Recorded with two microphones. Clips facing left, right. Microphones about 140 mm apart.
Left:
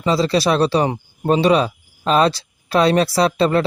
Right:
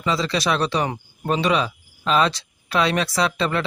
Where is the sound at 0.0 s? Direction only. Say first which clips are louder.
Left 6 dB; 35° left (ahead or behind).